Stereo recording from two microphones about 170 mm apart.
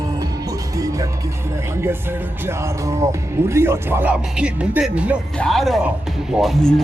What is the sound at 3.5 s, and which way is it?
Speech, 15° right (ahead or behind).